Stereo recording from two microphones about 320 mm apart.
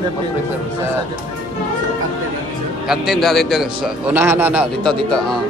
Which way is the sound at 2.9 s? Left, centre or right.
Centre.